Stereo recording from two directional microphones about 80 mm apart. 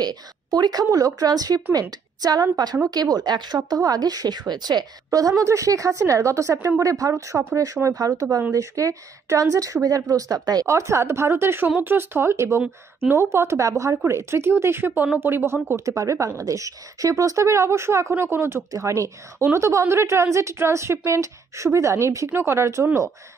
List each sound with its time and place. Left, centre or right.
0.0 s speech: right
3.5 s speech: right
5.3 s a woman's voice: right
10.7 s a woman's voice: right
15.7 s a woman's voice: right